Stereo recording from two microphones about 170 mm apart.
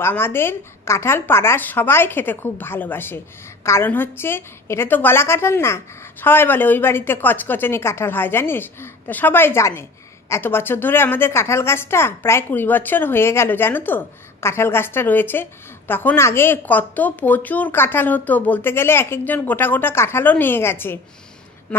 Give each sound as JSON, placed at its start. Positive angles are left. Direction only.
{"t": 0.0, "sound": "a woman's voice", "side_deg": 15}